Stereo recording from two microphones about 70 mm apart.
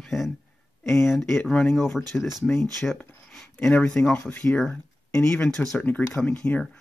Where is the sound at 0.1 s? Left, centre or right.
Centre.